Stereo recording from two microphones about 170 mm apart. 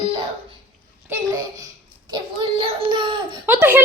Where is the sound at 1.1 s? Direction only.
20° right (ahead or behind).